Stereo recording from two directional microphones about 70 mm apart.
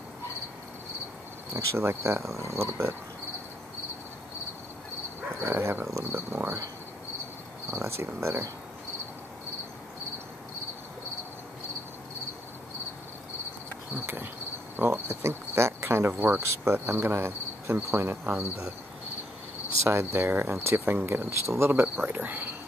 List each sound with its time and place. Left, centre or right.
1.5 s cricket: right
5.4 s cricket: right
7.7 s cricket: right
14.0 s cricket: right
19.8 s cricket: right
22.0 s speech: right